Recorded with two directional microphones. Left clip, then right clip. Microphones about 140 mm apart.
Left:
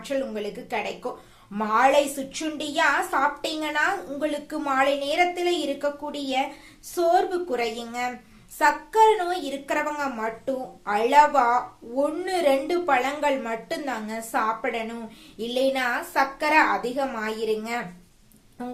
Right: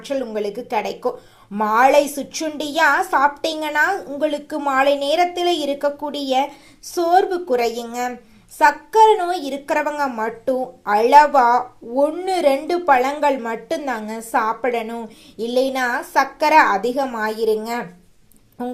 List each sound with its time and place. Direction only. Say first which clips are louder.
0.1 s a child's voice: right 5 dB; 40° right (ahead or behind)